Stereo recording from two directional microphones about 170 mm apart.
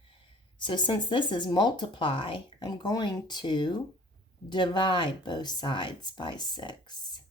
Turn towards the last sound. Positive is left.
turn(degrees=25)  # may be behind; listen again after turning